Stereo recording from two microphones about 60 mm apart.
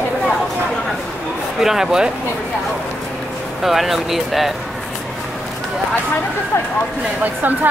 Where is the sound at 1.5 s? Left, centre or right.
Centre.